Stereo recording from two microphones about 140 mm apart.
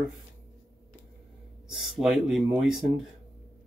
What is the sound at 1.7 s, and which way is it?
Speech, centre (ahead or behind).